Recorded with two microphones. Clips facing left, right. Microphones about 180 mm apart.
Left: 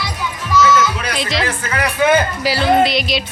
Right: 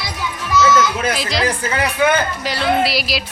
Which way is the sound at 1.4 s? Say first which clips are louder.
Right 2 dB; 30° right (ahead or behind).